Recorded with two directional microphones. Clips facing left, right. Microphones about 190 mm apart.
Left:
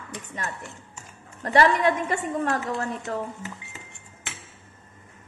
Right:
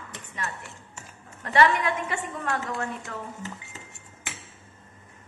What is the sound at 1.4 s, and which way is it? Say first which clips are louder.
A woman's voice: left 2 dB; 40° left (ahead or behind).